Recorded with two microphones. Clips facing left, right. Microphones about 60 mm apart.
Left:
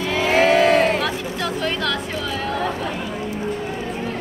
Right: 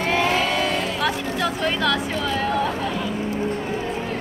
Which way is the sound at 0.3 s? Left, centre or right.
Left.